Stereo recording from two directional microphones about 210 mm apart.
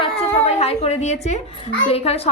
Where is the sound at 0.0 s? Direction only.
30° left (ahead or behind).